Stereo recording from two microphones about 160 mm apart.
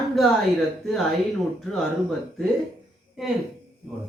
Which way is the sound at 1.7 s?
Centre (ahead or behind).